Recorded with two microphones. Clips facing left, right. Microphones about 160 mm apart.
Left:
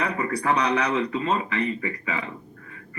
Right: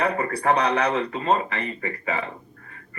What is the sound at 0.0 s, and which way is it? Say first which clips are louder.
A man's voice: right 2 dB; 50° right (ahead or behind).